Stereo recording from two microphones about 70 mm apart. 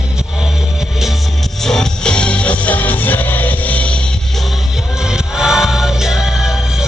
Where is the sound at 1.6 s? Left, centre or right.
Centre.